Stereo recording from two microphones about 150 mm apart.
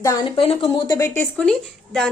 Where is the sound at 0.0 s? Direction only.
25° left (ahead or behind).